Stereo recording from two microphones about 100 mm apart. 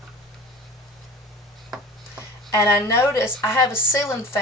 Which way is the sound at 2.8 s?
25° left (ahead or behind).